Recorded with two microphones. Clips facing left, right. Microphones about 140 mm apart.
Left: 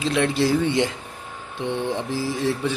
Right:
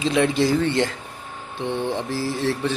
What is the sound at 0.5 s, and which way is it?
Speech, 10° left (ahead or behind).